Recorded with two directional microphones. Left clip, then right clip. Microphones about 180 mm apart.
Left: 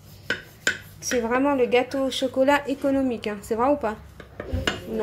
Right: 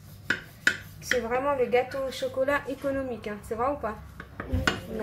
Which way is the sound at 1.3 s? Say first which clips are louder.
Left 5 dB; 45° left (ahead or behind).